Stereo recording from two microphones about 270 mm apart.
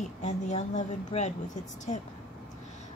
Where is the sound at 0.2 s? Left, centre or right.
Left.